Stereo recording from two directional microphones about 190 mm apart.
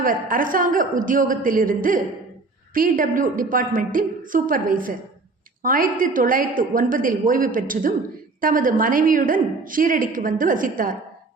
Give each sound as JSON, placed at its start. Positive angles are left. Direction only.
{"t": 0.0, "sound": "a woman's voice", "side_deg": -45}